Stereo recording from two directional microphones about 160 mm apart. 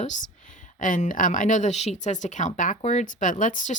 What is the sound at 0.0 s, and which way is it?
Speech, 55° left (ahead or behind).